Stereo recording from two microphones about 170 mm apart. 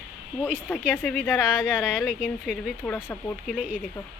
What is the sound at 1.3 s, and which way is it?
Speech, 5° right (ahead or behind).